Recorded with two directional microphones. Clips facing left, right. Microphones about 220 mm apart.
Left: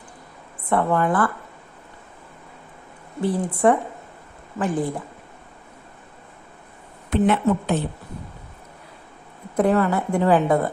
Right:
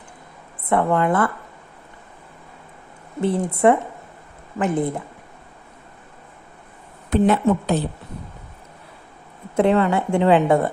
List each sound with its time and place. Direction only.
0.6 s a woman's voice: 20° right (ahead or behind)
3.2 s a woman's voice: 25° right (ahead or behind)
7.1 s speech: 35° right (ahead or behind)
9.6 s a woman's voice: 25° right (ahead or behind)